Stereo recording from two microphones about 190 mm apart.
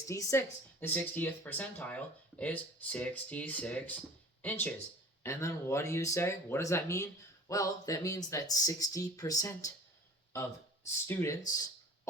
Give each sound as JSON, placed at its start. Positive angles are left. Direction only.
{"t": 0.1, "sound": "speech", "side_deg": 15}
{"t": 11.0, "sound": "speech", "side_deg": 15}